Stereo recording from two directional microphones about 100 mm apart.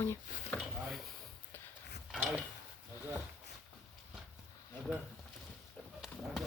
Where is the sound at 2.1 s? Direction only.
5° right (ahead or behind).